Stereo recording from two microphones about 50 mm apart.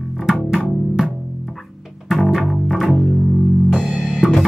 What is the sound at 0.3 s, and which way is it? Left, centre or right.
Music, centre.